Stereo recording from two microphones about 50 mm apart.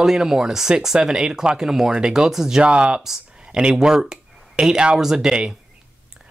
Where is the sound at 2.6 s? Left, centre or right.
Right.